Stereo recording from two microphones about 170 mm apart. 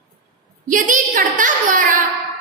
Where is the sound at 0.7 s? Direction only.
50° right (ahead or behind).